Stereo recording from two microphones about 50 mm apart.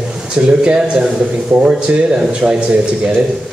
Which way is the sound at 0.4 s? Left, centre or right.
Right.